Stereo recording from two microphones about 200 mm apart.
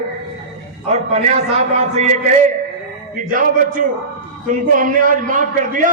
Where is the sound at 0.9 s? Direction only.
35° right (ahead or behind).